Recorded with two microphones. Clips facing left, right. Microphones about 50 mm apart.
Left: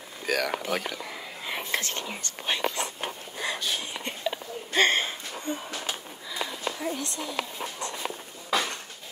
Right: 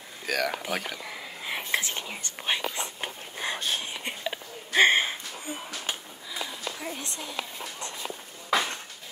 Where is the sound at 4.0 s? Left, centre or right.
Centre.